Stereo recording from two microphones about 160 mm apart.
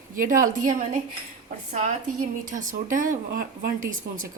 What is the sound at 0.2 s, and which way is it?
Speech, 55° right (ahead or behind).